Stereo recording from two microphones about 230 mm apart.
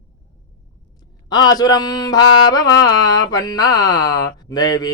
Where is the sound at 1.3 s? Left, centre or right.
Centre.